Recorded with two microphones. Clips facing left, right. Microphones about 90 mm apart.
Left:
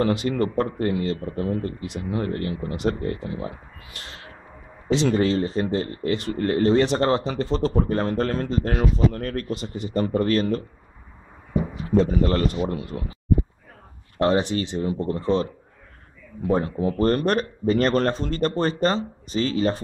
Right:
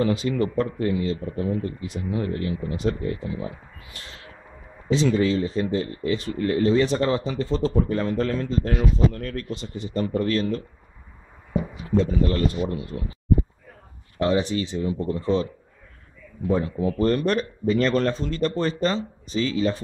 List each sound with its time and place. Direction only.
0.0 s a man's voice: 60° left (ahead or behind); by 7.7 s 75° left (ahead or behind)
7.9 s a man's voice: 55° left (ahead or behind)
12.0 s a man's voice: 60° left (ahead or behind)
14.1 s a man's voice: 50° left (ahead or behind)
16.4 s speech: 45° left (ahead or behind)